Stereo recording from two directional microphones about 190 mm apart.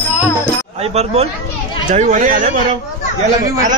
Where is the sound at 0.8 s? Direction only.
30° right (ahead or behind).